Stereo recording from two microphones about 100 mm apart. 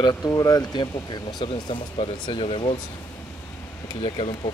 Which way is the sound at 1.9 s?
65° left (ahead or behind).